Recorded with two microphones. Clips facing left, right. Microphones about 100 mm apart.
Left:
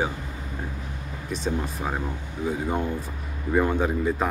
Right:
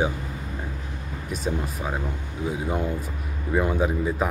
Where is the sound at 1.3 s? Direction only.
5° right (ahead or behind).